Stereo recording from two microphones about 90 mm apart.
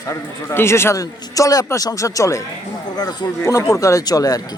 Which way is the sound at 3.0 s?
50° left (ahead or behind).